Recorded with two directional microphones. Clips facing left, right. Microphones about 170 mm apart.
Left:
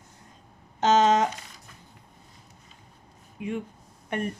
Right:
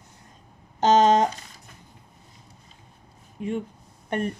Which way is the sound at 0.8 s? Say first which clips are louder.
Right 3 dB; 35° right (ahead or behind).